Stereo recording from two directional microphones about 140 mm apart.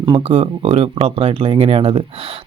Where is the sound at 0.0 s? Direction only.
40° right (ahead or behind).